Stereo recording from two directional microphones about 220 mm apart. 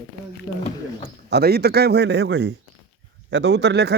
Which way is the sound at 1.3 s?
45° right (ahead or behind).